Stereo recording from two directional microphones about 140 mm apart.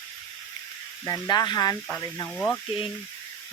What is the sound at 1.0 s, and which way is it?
Speech, 25° left (ahead or behind).